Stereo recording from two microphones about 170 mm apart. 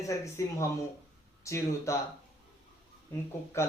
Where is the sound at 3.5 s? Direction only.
15° left (ahead or behind).